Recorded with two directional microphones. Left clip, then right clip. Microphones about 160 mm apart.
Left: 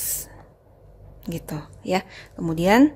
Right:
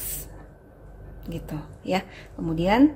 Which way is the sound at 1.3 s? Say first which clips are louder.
Left 3 dB; 55° left (ahead or behind).